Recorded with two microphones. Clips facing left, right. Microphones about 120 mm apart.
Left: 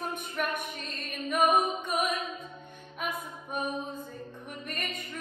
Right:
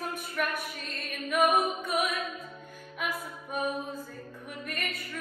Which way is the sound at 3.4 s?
5° right (ahead or behind).